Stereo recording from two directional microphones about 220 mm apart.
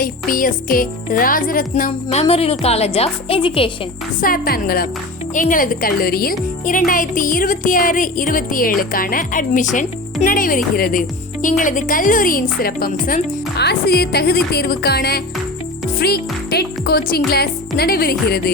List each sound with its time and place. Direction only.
0.0 s music: 40° left (ahead or behind)
4.2 s speech: 40° left (ahead or behind)
5.3 s music: 35° left (ahead or behind)
11.4 s speech: 35° left (ahead or behind)